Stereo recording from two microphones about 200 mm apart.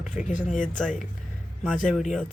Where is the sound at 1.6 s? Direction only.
Centre (ahead or behind).